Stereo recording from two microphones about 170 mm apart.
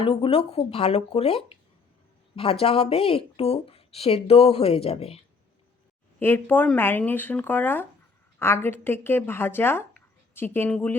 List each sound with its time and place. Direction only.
0.0 s speech: 35° left (ahead or behind)
6.1 s speech: 10° left (ahead or behind)